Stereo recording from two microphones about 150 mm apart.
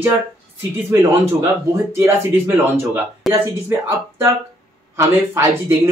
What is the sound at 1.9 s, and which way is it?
Speech, 15° right (ahead or behind).